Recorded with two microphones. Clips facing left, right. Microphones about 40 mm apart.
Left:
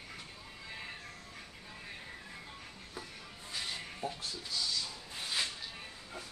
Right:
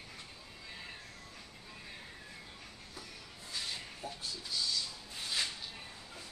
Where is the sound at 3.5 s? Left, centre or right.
Left.